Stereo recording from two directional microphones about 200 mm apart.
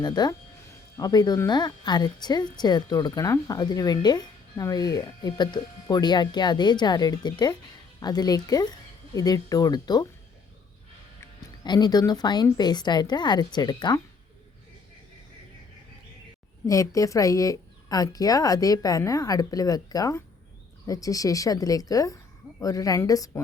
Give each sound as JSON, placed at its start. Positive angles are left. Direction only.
{"t": 0.0, "sound": "speech", "side_deg": 20}
{"t": 11.2, "sound": "speech", "side_deg": 20}
{"t": 16.6, "sound": "speech", "side_deg": 15}